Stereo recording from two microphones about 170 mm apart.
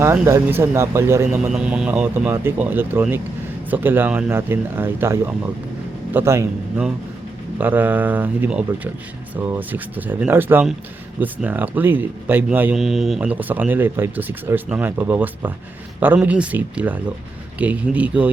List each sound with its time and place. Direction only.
0.0 s a man's voice: 15° right (ahead or behind)
1.5 s a man's voice: 5° right (ahead or behind)